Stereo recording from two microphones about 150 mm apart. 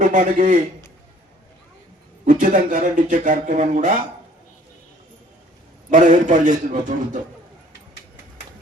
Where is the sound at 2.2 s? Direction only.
60° right (ahead or behind).